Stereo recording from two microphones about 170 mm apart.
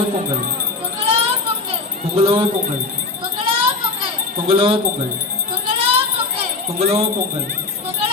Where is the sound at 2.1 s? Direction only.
35° right (ahead or behind).